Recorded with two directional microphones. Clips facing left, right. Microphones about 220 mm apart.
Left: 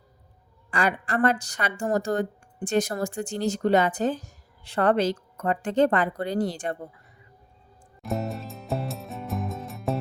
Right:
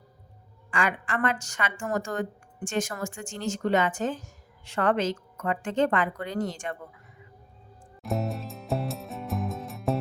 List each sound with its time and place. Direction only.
0.7 s a woman's voice: 35° left (ahead or behind)
8.0 s music: centre (ahead or behind)